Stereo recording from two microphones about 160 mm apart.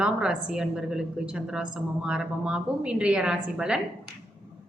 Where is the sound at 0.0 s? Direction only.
5° right (ahead or behind).